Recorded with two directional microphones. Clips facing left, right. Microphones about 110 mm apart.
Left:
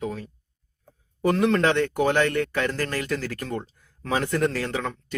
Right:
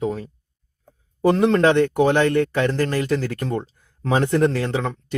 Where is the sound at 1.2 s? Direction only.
30° right (ahead or behind).